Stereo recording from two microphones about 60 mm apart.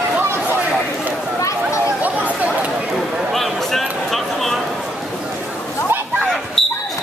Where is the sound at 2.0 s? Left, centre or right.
Right.